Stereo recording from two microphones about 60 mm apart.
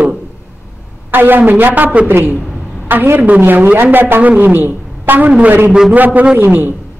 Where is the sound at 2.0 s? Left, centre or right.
Right.